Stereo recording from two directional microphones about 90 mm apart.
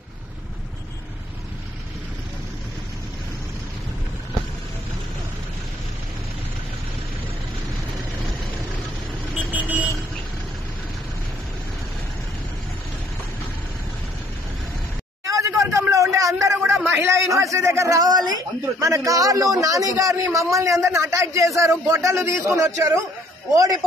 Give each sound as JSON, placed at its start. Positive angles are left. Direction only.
{"t": 9.5, "sound": "vehicle", "side_deg": -15}
{"t": 15.2, "sound": "a sound", "side_deg": -35}
{"t": 16.9, "sound": "a man's voice", "side_deg": -35}